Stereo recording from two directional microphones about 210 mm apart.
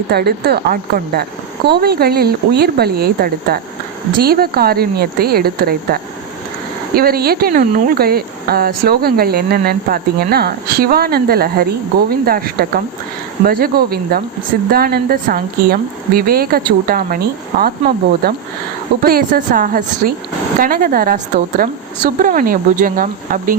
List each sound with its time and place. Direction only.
0.1 s speech: 50° right (ahead or behind)